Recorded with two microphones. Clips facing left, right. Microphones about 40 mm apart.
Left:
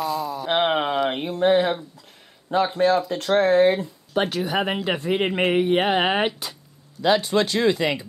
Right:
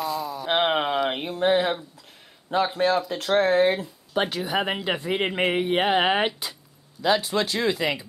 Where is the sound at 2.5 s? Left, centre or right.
Centre.